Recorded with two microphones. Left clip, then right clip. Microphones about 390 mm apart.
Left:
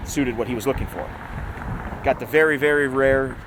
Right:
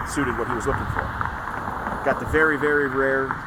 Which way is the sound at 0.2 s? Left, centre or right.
Left.